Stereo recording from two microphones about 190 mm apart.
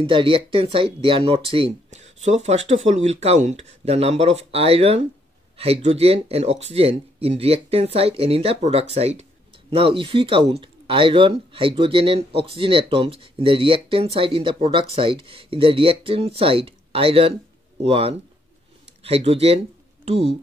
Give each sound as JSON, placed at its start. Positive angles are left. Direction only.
{"t": 0.0, "sound": "speech", "side_deg": -25}